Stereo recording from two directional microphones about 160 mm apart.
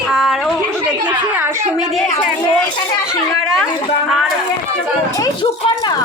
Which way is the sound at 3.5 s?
Centre (ahead or behind).